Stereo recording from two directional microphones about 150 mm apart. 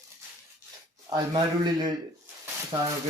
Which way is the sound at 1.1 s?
25° right (ahead or behind).